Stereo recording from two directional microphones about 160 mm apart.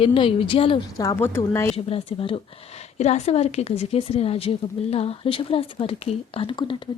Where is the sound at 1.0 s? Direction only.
15° left (ahead or behind).